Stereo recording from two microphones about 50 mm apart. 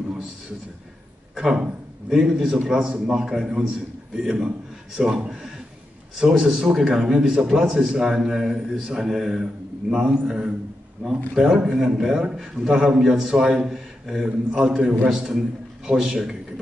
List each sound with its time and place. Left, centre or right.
1.4 s a man's voice: centre
10.0 s a man's voice: centre
13.0 s speech: centre
15.0 s speech: centre